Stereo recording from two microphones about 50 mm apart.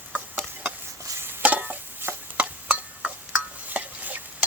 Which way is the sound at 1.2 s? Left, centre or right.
Right.